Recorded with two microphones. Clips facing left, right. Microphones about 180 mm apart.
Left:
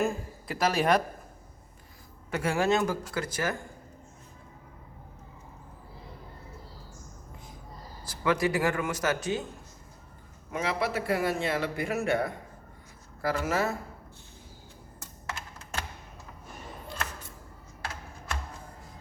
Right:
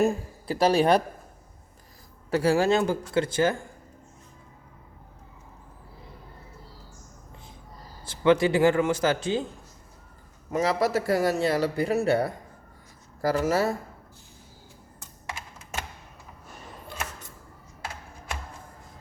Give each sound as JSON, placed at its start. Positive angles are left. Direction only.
{"t": 0.0, "sound": "speech", "side_deg": -30}
{"t": 2.3, "sound": "a man's voice", "side_deg": -35}
{"t": 8.0, "sound": "a man's voice", "side_deg": -25}
{"t": 10.5, "sound": "a man's voice", "side_deg": -40}